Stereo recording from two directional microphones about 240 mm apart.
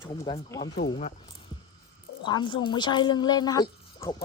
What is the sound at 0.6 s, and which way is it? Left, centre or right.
Speech, left.